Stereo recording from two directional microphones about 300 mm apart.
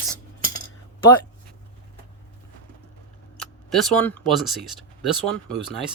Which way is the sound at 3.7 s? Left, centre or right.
Centre.